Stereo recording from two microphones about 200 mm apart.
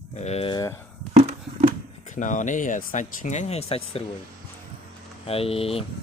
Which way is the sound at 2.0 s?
40° left (ahead or behind).